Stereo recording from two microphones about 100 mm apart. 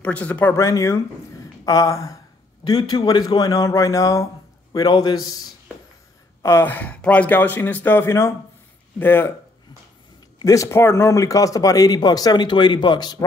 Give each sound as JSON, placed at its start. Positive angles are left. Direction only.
{"t": 0.0, "sound": "speech", "side_deg": 15}
{"t": 0.6, "sound": "speech", "side_deg": 30}
{"t": 2.6, "sound": "speech", "side_deg": 45}
{"t": 4.7, "sound": "a man's voice", "side_deg": 50}
{"t": 6.6, "sound": "speech", "side_deg": 15}
{"t": 10.4, "sound": "speech", "side_deg": 30}